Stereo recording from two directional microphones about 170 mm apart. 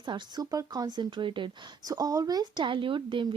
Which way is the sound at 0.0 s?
25° right (ahead or behind).